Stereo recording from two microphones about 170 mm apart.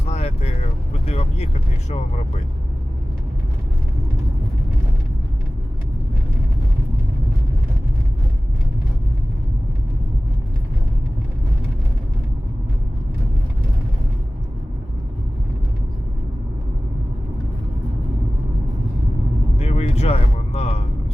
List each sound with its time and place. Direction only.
0.0 s vehicle: 40° left (ahead or behind)
1.0 s speech: 40° left (ahead or behind)
19.5 s a sound: 40° left (ahead or behind)